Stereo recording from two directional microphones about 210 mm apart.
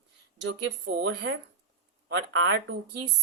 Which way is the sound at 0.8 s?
60° right (ahead or behind).